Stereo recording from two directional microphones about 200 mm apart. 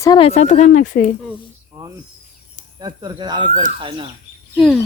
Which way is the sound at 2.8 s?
20° right (ahead or behind).